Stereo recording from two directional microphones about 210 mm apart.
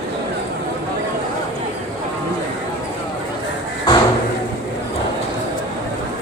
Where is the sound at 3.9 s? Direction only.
20° left (ahead or behind).